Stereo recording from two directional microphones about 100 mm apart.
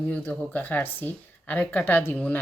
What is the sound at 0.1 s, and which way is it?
A woman's voice, 15° left (ahead or behind).